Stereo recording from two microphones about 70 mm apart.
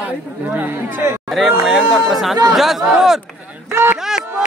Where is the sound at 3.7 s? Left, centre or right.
Right.